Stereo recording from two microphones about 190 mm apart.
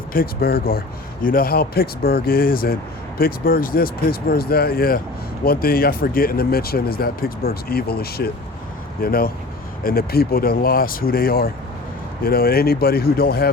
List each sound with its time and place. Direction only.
0.1 s speech: 50° left (ahead or behind)